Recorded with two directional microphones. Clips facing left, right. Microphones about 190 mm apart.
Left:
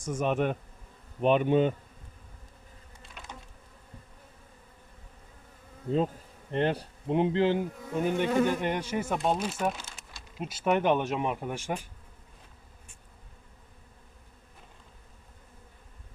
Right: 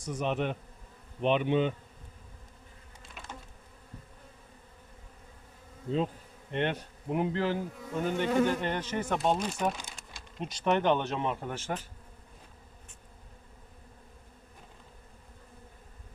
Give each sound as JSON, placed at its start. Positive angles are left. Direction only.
{"t": 0.0, "sound": "bee", "side_deg": 50}
{"t": 3.0, "sound": "insect", "side_deg": 0}
{"t": 6.5, "sound": "bee", "side_deg": 35}
{"t": 9.1, "sound": "speech", "side_deg": 0}
{"t": 10.3, "sound": "bee", "side_deg": 5}